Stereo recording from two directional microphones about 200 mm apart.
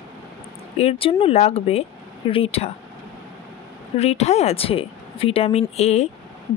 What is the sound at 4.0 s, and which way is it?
A woman's voice, 30° left (ahead or behind).